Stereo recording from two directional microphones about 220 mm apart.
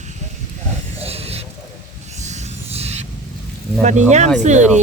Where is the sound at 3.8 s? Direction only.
30° right (ahead or behind).